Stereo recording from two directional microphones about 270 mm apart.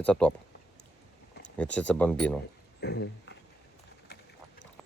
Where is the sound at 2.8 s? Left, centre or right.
Left.